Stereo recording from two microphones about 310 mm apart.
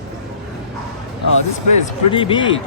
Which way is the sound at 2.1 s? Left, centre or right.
Centre.